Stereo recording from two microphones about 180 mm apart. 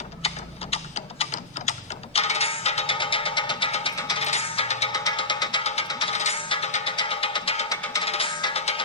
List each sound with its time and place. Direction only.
0.2 s a sound: 35° left (ahead or behind)
2.1 s music: 35° left (ahead or behind)
4.9 s music: 20° left (ahead or behind)